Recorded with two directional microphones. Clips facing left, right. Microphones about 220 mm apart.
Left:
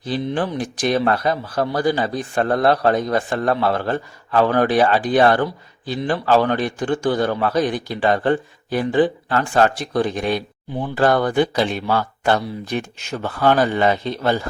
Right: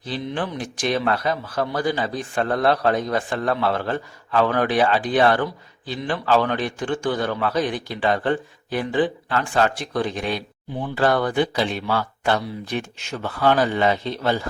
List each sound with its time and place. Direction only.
0.1 s a man's voice: 40° left (ahead or behind)